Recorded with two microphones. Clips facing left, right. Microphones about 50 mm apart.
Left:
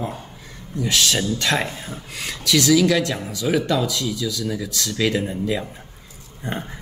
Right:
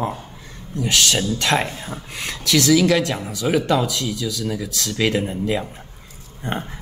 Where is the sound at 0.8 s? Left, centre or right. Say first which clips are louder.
Right 1 dB; centre.